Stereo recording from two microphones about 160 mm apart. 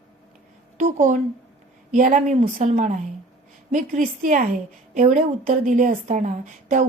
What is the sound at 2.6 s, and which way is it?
A woman's voice, 55° right (ahead or behind).